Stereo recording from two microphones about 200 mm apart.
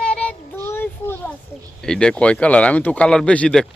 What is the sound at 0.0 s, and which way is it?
Child singing, 5° left (ahead or behind).